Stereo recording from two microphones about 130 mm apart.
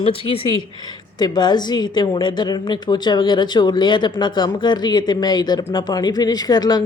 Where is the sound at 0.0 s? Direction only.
45° left (ahead or behind).